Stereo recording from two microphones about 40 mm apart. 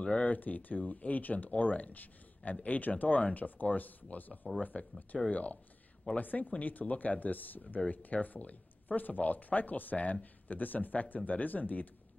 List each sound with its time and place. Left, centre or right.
0.2 s speech: left